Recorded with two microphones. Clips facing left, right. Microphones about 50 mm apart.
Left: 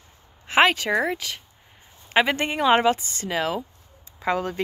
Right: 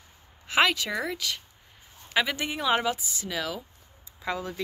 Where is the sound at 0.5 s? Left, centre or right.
Left.